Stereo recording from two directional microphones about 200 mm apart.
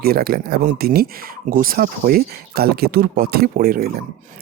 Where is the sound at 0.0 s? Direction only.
50° right (ahead or behind).